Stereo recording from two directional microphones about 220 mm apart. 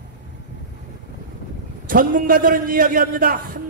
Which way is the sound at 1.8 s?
40° right (ahead or behind).